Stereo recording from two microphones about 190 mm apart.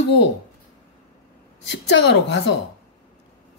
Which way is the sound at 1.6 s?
70° left (ahead or behind).